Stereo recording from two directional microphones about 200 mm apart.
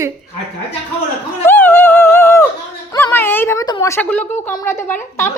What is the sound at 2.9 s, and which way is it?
A woman's voice, 10° left (ahead or behind).